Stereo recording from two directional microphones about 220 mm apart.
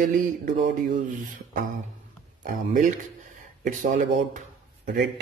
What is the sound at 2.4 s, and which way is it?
Speech, 35° right (ahead or behind).